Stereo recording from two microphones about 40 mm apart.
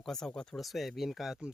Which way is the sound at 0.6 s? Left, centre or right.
Centre.